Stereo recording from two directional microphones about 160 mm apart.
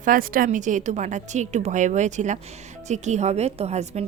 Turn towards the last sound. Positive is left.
turn(degrees=-40)  # may be behind; listen again after turning